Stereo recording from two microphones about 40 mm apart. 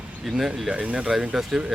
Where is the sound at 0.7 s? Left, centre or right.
Right.